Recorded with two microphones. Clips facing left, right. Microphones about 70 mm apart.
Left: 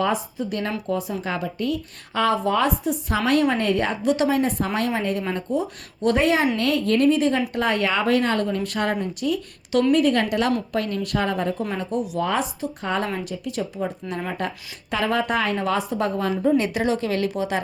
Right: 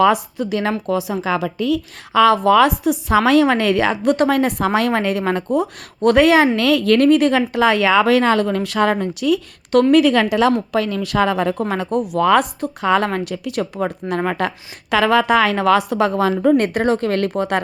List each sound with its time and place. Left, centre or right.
0.0 s a woman's voice: right
4.0 s speech: right
4.4 s a woman's voice: right
6.6 s a woman's voice: right
7.5 s a woman's voice: right
12.2 s speech: right
12.8 s a woman's voice: right
13.1 s a woman's voice: right
14.3 s a woman's voice: right
16.6 s speech: right